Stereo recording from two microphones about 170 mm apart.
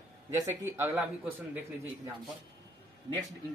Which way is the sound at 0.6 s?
15° right (ahead or behind).